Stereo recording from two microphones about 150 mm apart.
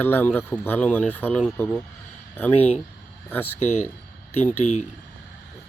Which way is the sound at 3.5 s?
50° left (ahead or behind).